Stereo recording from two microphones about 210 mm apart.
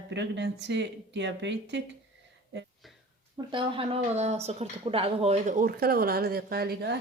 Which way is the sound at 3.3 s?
25° right (ahead or behind).